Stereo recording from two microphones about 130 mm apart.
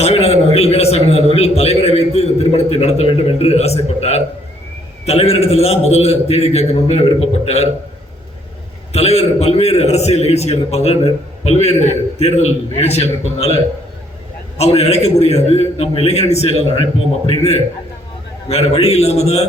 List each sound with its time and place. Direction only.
0.0 s a sound: 55° left (ahead or behind)
1.4 s a man's voice: 55° left (ahead or behind)
8.9 s a man's voice: 50° left (ahead or behind)
14.6 s a man's voice: 55° left (ahead or behind)
18.4 s a man's voice: 55° left (ahead or behind)